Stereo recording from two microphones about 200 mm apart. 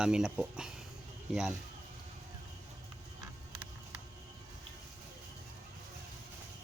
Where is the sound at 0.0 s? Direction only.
5° right (ahead or behind).